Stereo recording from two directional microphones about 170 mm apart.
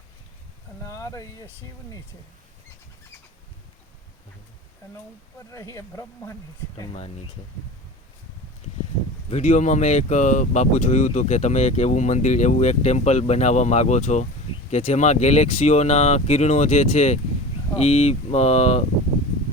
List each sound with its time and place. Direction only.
0.9 s a sound: 20° left (ahead or behind)
5.5 s speech: 20° left (ahead or behind)
9.3 s speech: 45° left (ahead or behind)